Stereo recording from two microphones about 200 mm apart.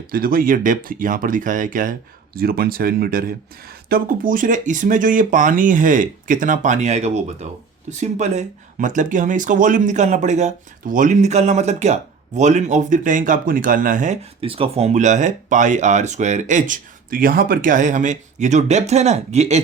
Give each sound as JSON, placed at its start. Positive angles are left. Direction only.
{"t": 0.1, "sound": "speech", "side_deg": -45}